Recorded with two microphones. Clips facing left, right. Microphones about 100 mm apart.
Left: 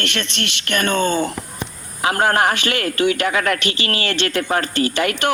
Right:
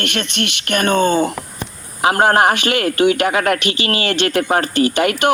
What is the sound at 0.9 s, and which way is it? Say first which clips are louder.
A man's voice: right 4 dB; 15° right (ahead or behind).